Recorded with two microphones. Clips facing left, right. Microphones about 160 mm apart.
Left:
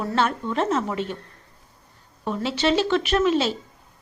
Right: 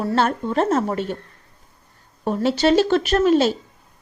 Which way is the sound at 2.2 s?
45° right (ahead or behind).